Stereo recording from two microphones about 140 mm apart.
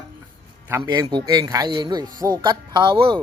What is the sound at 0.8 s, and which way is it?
Speech, 30° right (ahead or behind).